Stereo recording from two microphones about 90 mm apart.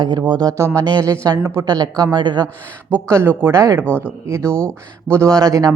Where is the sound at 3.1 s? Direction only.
25° right (ahead or behind).